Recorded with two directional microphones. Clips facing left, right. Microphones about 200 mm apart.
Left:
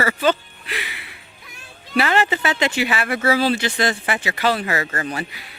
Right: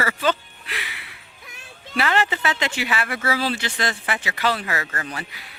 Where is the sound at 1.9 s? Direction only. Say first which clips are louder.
Left 3 dB; 10° left (ahead or behind).